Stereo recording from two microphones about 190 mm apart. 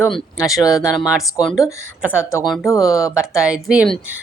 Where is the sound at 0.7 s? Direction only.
Centre (ahead or behind).